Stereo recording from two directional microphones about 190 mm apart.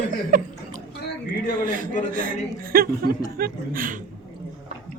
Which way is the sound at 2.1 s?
50° right (ahead or behind).